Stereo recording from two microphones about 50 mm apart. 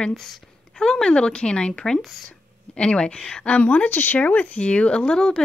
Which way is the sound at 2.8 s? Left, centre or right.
Centre.